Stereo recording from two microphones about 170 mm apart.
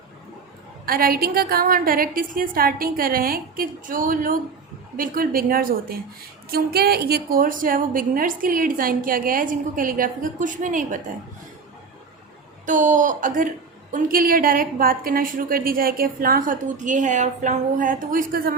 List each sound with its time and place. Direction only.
0.9 s a woman's voice: 60° right (ahead or behind)
12.6 s a woman's voice: 45° right (ahead or behind)